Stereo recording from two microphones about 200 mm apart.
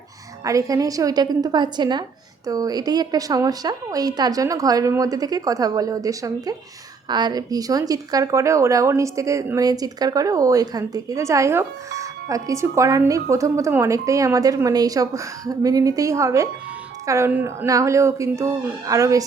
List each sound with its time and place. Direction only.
0.4 s a woman's voice: 15° right (ahead or behind)